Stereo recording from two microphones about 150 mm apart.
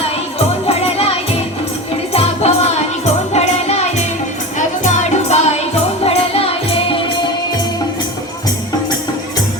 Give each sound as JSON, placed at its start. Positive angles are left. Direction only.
{"t": 0.7, "sound": "music", "side_deg": 40}
{"t": 2.1, "sound": "music", "side_deg": 45}